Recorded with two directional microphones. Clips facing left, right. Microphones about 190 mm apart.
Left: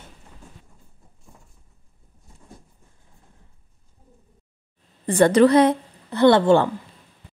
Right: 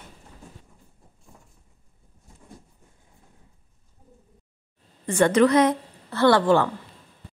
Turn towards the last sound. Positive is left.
turn(degrees=25)  # may be behind; listen again after turning